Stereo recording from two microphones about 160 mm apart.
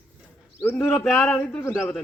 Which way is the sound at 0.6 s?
10° left (ahead or behind).